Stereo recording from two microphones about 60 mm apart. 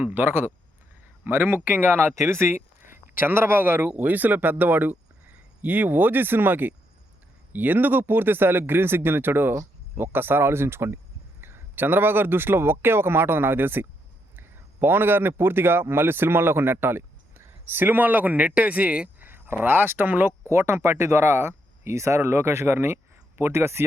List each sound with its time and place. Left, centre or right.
0.0 s speech: right
3.2 s a man's voice: right
20.5 s speech: right